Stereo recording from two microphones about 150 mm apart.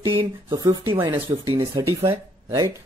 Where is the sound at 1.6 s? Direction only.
15° right (ahead or behind).